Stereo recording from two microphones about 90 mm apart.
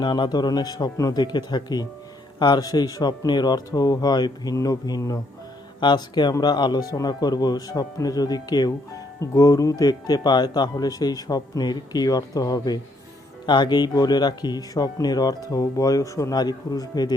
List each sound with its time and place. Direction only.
0.0 s speech: 60° left (ahead or behind); by 5.2 s 40° left (ahead or behind)
5.8 s speech: 55° left (ahead or behind); by 16.3 s 35° left (ahead or behind)
16.3 s speech: 50° left (ahead or behind)